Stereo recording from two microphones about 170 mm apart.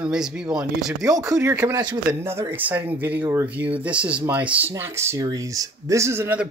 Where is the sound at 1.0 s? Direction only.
20° right (ahead or behind).